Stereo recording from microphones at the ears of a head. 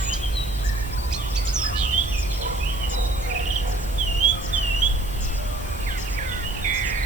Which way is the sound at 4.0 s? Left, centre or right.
Right.